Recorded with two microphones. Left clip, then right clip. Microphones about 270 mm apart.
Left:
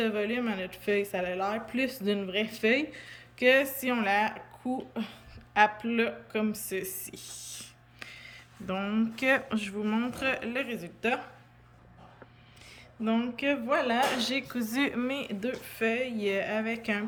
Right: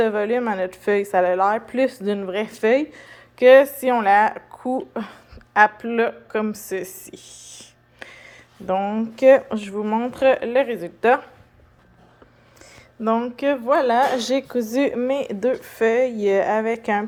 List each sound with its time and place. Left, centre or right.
0.0 s a woman's voice: centre
13.0 s speech: centre